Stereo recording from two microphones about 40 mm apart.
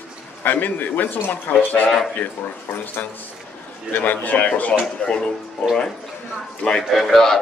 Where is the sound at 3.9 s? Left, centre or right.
Left.